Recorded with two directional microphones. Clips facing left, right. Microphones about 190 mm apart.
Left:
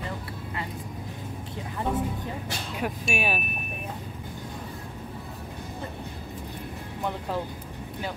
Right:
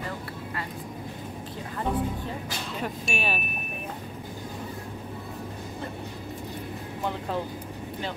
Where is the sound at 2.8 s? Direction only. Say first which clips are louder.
Left 3 dB; 10° left (ahead or behind).